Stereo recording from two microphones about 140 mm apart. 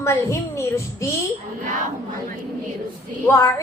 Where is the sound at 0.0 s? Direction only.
20° left (ahead or behind).